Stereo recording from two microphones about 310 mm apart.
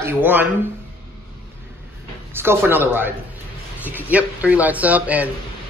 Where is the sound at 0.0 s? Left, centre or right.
Centre.